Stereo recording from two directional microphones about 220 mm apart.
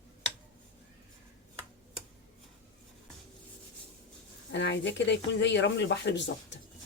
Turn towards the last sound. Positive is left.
turn(degrees=55)  # may be behind; listen again after turning